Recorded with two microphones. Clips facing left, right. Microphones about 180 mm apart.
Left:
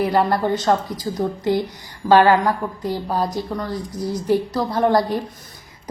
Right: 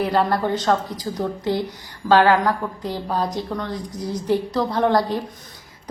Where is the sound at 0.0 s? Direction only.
10° left (ahead or behind).